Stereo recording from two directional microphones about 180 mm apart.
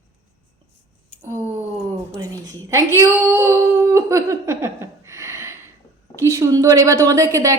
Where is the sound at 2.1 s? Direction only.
15° right (ahead or behind).